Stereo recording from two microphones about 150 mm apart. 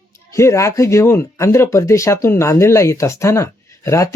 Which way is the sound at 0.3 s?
20° left (ahead or behind).